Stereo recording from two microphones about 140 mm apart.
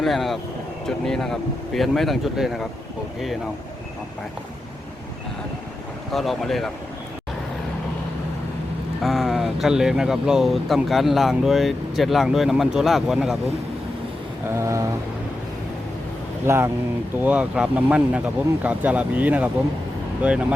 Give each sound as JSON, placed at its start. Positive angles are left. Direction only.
{"t": 0.0, "sound": "speech", "side_deg": 0}
{"t": 6.1, "sound": "speech", "side_deg": 0}
{"t": 9.0, "sound": "speech", "side_deg": 0}
{"t": 14.4, "sound": "a sound", "side_deg": -20}
{"t": 16.5, "sound": "a sound", "side_deg": -20}
{"t": 17.2, "sound": "speech", "side_deg": -10}